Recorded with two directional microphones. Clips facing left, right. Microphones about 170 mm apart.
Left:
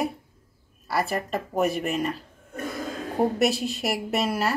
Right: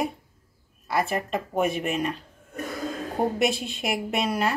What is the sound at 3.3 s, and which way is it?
Speech, centre (ahead or behind).